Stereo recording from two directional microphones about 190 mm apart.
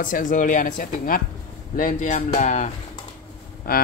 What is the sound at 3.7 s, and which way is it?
Speech, 50° left (ahead or behind).